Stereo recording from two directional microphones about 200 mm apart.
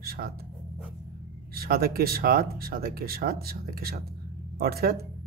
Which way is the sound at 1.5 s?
50° right (ahead or behind).